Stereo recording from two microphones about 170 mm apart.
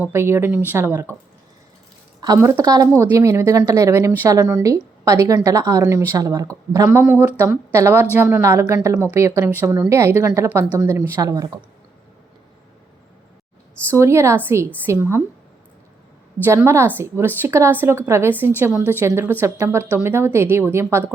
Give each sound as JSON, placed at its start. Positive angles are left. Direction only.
{"t": 0.0, "sound": "a woman's voice", "side_deg": -15}
{"t": 2.2, "sound": "a woman's voice", "side_deg": -20}
{"t": 13.9, "sound": "a woman's voice", "side_deg": -15}
{"t": 16.4, "sound": "a woman's voice", "side_deg": -15}